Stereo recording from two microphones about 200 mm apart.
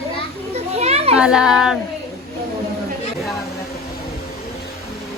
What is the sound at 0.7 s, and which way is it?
Children playing, 30° right (ahead or behind).